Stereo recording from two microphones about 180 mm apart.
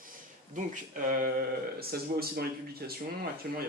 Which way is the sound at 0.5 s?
50° right (ahead or behind).